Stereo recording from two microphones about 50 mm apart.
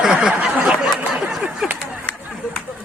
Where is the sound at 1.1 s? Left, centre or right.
Centre.